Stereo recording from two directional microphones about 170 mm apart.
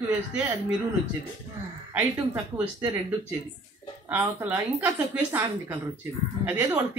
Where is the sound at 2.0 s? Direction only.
15° right (ahead or behind).